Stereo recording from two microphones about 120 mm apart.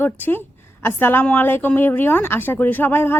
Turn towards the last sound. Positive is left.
turn(degrees=15)  # may be behind; listen again after turning